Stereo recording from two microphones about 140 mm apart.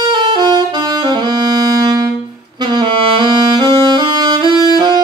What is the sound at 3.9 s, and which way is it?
Saxophone, 35° right (ahead or behind).